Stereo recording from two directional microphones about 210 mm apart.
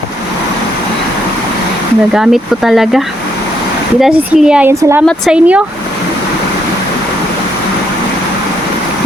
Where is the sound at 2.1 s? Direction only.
Centre (ahead or behind).